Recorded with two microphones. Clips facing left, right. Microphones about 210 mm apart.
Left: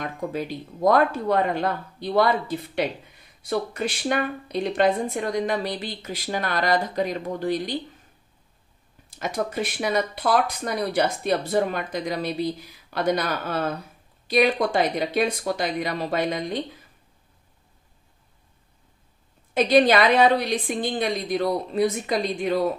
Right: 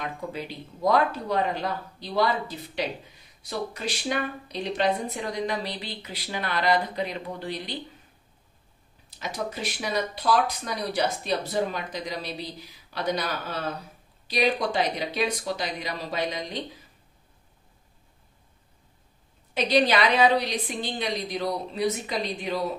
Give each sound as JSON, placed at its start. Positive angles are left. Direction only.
{"t": 0.0, "sound": "speech", "side_deg": 45}
{"t": 9.1, "sound": "speech", "side_deg": 50}
{"t": 19.5, "sound": "speech", "side_deg": 50}